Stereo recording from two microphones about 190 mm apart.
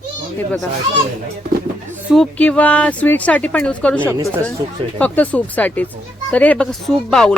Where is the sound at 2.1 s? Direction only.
5° left (ahead or behind).